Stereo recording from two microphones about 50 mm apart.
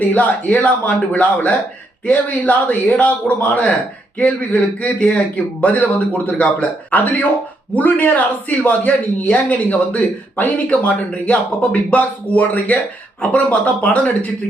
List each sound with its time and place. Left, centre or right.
0.0 s a man's voice: left